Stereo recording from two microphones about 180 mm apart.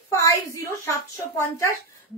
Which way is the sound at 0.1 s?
20° left (ahead or behind).